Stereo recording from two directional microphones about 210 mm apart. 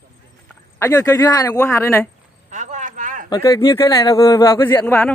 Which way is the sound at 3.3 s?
15° left (ahead or behind).